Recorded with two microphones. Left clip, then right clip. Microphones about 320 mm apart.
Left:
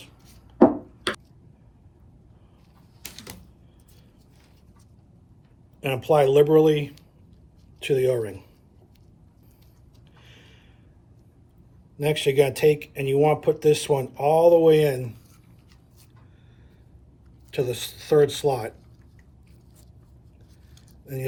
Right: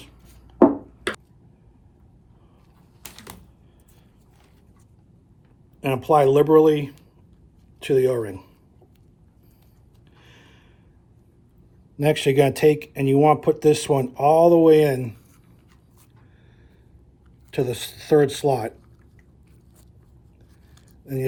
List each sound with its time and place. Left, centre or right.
5.8 s speech: right
10.2 s a sound: right
11.9 s speech: right
17.5 s speech: right